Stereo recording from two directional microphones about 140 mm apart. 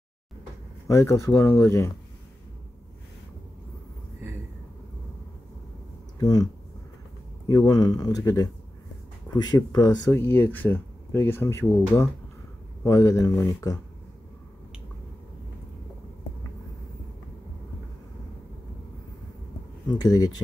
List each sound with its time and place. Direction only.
0.8 s speech: 20° left (ahead or behind)
6.1 s speech: 25° left (ahead or behind)
7.4 s speech: 30° left (ahead or behind)
19.9 s speech: 30° left (ahead or behind)